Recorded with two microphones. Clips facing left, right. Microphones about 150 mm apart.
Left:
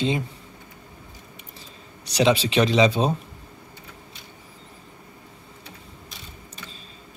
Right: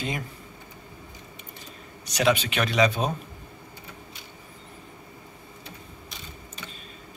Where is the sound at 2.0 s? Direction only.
30° left (ahead or behind).